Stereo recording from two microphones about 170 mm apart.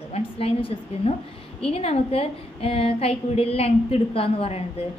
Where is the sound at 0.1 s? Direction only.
35° left (ahead or behind).